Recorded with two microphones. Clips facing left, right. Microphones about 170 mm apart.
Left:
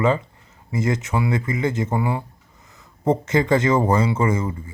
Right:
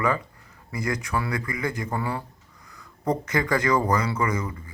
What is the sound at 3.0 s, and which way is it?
Speech, 25° left (ahead or behind).